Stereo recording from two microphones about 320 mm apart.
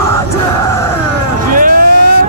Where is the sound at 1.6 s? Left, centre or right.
Right.